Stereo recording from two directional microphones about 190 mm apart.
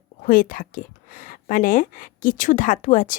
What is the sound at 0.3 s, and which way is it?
Speech, 45° left (ahead or behind).